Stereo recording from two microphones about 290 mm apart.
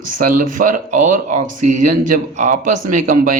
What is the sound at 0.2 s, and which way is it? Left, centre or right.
Speech, right.